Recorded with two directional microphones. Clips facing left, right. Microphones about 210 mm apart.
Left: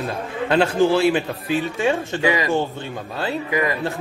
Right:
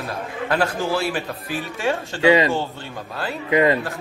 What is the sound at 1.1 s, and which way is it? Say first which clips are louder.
A man's voice: left 5 dB; 20° left (ahead or behind).